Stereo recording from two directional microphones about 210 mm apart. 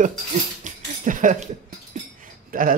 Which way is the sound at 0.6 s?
40° right (ahead or behind).